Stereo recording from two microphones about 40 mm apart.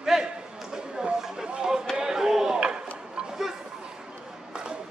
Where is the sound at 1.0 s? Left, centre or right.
Centre.